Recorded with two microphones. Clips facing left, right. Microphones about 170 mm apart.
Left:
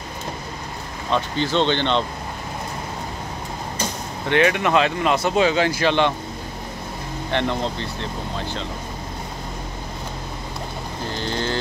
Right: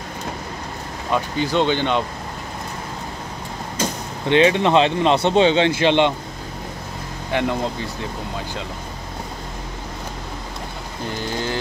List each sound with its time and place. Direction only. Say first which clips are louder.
1.1 s speech: right 1 dB; 10° right (ahead or behind)
4.3 s speech: right 3 dB; 20° right (ahead or behind)
7.3 s speech: right 2 dB; 10° right (ahead or behind)
11.1 s speech: even; 15° right (ahead or behind)